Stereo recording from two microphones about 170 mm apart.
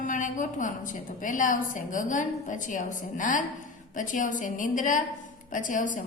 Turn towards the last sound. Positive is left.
turn(degrees=50)  # may be behind; listen again after turning